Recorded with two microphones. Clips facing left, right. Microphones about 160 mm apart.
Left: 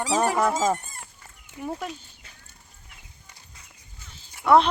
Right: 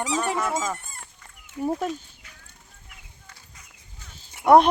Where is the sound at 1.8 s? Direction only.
45° right (ahead or behind).